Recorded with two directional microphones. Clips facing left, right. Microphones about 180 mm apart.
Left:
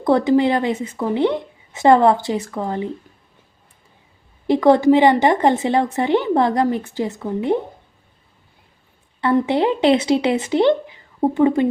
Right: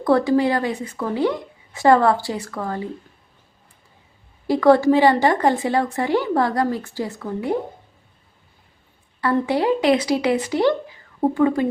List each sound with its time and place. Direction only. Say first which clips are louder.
0.0 s a woman's voice: left 2 dB; 20° left (ahead or behind)
4.4 s a woman's voice: left 2 dB; 20° left (ahead or behind)
9.2 s a woman's voice: left 2 dB; 25° left (ahead or behind)